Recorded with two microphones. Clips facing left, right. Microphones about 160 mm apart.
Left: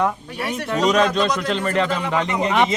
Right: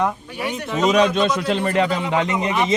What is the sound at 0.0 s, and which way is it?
A man's voice, centre (ahead or behind).